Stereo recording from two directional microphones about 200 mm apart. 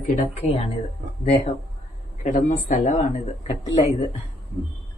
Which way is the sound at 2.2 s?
40° left (ahead or behind).